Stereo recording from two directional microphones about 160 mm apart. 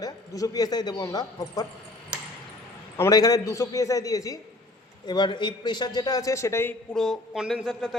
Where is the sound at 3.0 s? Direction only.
25° left (ahead or behind).